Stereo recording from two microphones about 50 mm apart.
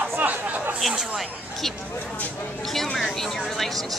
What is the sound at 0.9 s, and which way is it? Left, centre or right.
Speech, centre.